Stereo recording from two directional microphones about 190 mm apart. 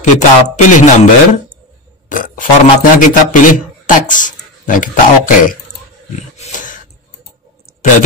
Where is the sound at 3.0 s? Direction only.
45° left (ahead or behind).